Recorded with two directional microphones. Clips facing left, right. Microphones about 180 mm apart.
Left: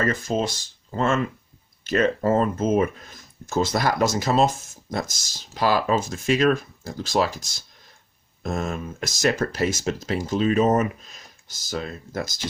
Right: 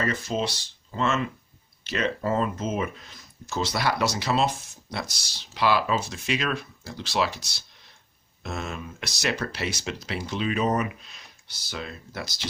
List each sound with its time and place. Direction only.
0.0 s speech: 50° left (ahead or behind)